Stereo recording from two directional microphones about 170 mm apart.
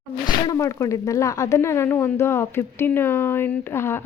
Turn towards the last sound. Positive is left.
turn(degrees=15)  # may be behind; listen again after turning